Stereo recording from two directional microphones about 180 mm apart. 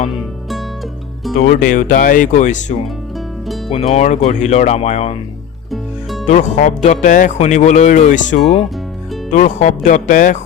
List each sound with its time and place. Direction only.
1.4 s speech: 45° left (ahead or behind)
6.2 s speech: 40° left (ahead or behind)